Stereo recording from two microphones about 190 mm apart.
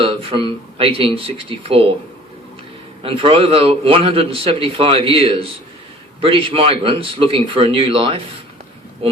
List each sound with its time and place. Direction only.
0.0 s a man's voice: 30° right (ahead or behind)
3.0 s a man's voice: 30° right (ahead or behind)